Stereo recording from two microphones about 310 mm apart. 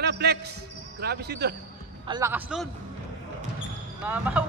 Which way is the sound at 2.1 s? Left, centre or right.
Centre.